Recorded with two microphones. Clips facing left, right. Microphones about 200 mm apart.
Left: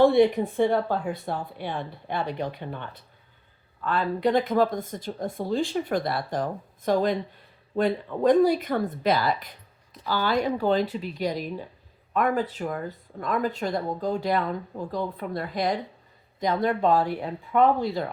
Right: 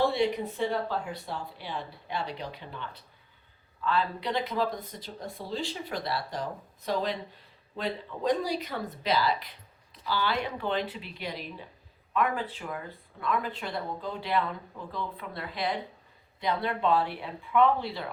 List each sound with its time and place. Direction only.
0.0 s speech: 50° left (ahead or behind)